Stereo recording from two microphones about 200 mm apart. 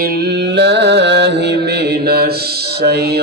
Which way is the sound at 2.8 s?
55° right (ahead or behind).